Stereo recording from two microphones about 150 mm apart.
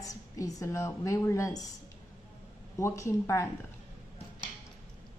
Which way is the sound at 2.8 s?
20° left (ahead or behind).